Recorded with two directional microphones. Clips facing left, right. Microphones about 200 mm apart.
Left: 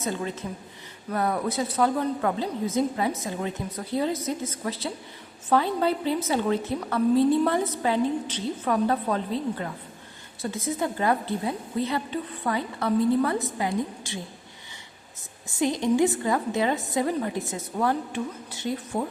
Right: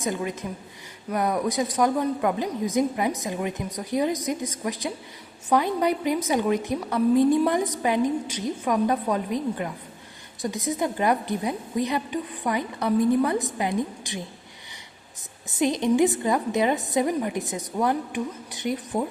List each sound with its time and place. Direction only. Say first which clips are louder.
0.0 s a woman's voice: right 2 dB; 15° right (ahead or behind)
15.4 s a woman's voice: right 2 dB; 20° right (ahead or behind)